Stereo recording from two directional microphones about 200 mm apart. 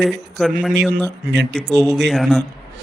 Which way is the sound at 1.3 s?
60° right (ahead or behind).